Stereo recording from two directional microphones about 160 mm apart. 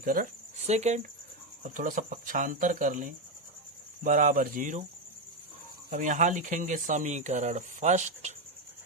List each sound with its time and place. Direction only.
0.0 s speech: 60° right (ahead or behind)
0.7 s speech: 45° right (ahead or behind)
1.6 s speech: 55° right (ahead or behind)
5.9 s speech: 55° right (ahead or behind)